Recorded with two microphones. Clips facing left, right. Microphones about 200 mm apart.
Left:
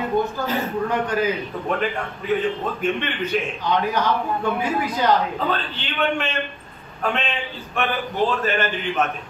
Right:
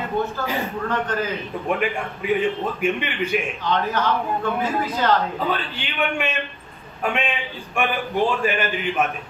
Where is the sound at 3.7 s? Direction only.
15° left (ahead or behind).